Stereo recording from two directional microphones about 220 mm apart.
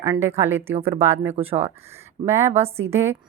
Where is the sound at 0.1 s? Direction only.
10° right (ahead or behind).